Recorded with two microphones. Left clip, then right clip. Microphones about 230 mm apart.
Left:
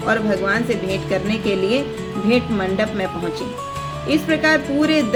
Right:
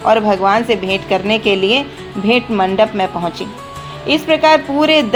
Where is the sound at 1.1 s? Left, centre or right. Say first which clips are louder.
Right 8 dB; right.